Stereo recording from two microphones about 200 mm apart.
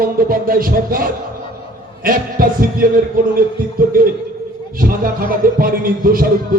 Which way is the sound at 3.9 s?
45° right (ahead or behind).